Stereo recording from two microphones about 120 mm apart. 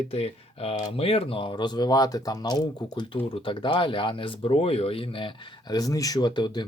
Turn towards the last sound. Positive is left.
turn(degrees=40)  # may be behind; listen again after turning